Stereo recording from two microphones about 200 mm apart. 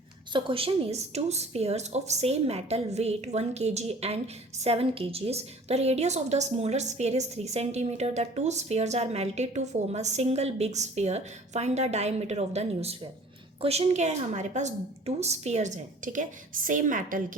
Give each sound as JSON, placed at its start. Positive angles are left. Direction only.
{"t": 0.3, "sound": "a woman's voice", "side_deg": -25}